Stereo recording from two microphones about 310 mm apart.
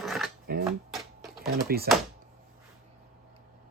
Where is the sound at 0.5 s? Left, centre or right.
Right.